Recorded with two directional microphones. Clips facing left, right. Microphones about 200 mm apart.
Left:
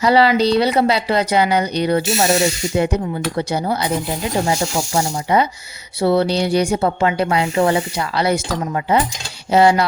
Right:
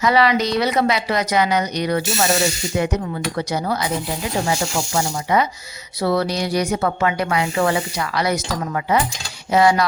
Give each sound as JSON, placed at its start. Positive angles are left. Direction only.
{"t": 0.0, "sound": "a woman's voice", "side_deg": 30}
{"t": 4.9, "sound": "a woman's voice", "side_deg": 30}